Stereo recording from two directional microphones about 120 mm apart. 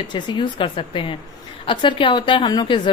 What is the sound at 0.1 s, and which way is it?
A woman's voice, 40° left (ahead or behind).